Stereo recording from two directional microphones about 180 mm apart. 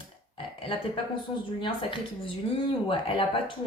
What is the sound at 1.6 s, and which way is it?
Speech, 30° left (ahead or behind).